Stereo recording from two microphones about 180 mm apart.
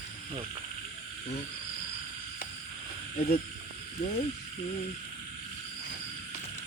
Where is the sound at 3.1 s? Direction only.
35° left (ahead or behind).